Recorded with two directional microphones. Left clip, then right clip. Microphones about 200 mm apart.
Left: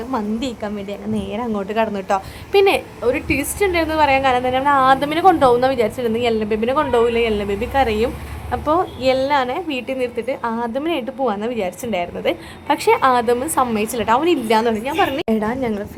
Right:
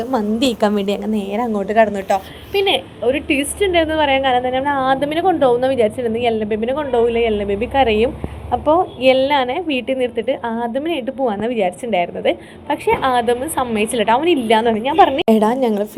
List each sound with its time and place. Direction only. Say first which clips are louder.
0.1 s a woman's voice: right 5 dB; 15° right (ahead or behind)
1.1 s a woman's voice: right 3 dB; 10° right (ahead or behind)
2.0 s a woman's voice: right 1 dB; 15° left (ahead or behind); by 15.2 s 5° right (ahead or behind)
15.3 s a woman's voice: right 6 dB; 20° right (ahead or behind)